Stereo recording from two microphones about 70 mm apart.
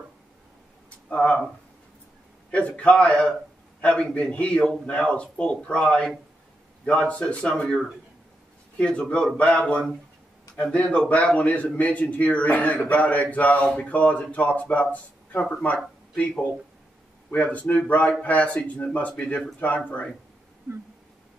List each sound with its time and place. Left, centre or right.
0.8 s a sound: centre
2.5 s a man's voice: centre
17.3 s a man's voice: left